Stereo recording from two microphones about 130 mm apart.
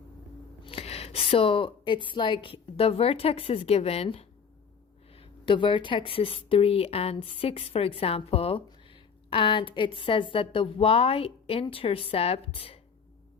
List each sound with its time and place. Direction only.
0.6 s speech: 50° left (ahead or behind)